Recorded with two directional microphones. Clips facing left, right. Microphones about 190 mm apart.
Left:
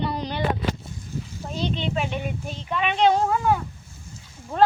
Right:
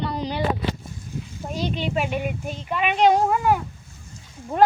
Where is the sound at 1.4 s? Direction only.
10° right (ahead or behind).